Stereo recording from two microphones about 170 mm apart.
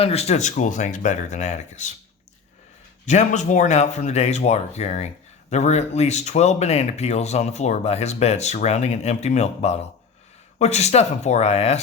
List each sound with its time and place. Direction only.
0.0 s speech: 35° left (ahead or behind)
3.1 s speech: 45° left (ahead or behind)